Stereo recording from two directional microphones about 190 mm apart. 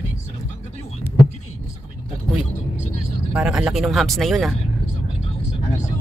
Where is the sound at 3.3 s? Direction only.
5° right (ahead or behind).